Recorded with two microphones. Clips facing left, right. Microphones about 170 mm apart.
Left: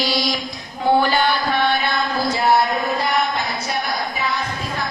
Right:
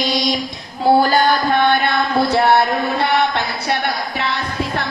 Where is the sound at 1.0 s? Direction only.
40° right (ahead or behind); by 4.3 s 70° right (ahead or behind).